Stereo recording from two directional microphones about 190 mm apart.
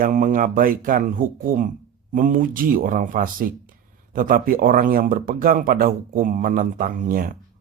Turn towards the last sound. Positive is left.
turn(degrees=-45)  # may be behind; listen again after turning